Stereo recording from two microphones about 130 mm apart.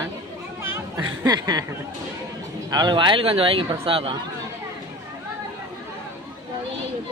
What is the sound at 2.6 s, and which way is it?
Speech, 35° right (ahead or behind).